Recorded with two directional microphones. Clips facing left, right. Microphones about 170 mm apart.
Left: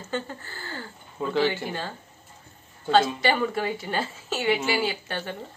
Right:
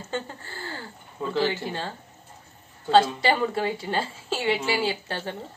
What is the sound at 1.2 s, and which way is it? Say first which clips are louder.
Speech: left 1 dB; centre (ahead or behind).